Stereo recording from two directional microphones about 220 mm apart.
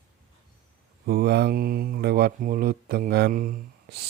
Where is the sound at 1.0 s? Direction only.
45° right (ahead or behind).